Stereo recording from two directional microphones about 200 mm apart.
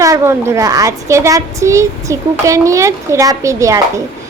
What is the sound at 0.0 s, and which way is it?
A woman's voice, 15° right (ahead or behind).